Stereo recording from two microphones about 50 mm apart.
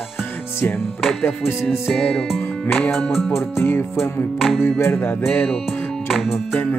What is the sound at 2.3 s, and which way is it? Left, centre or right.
Music, centre.